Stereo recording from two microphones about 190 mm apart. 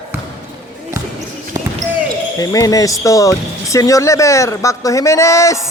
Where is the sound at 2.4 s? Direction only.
20° left (ahead or behind).